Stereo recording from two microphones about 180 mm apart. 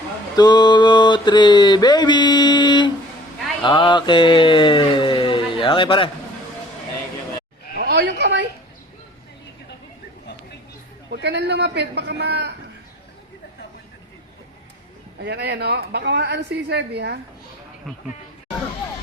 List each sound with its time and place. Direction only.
0.3 s a sound: 20° left (ahead or behind)
3.6 s speech: 25° left (ahead or behind)
7.8 s a sound: 70° right (ahead or behind)
11.1 s a woman's voice: 75° right (ahead or behind)
15.2 s a woman's voice: 65° right (ahead or behind)
17.9 s speech: centre (ahead or behind)